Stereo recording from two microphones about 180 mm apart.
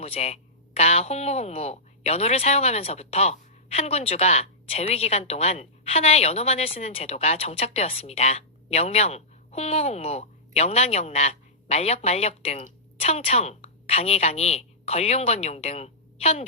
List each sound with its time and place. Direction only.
0.0 s speech: 35° left (ahead or behind)